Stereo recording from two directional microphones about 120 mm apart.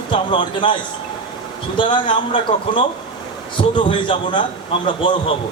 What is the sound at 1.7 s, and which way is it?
A man's voice, 40° left (ahead or behind).